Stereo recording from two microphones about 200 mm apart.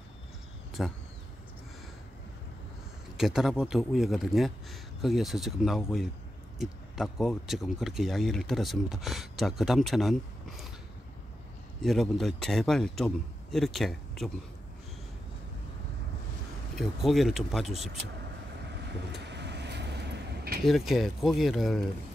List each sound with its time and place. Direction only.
0.8 s speech: centre (ahead or behind)
3.2 s speech: centre (ahead or behind)
11.8 s speech: centre (ahead or behind)
16.7 s speech: centre (ahead or behind)
19.2 s vehicle: 60° right (ahead or behind)
20.6 s speech: centre (ahead or behind)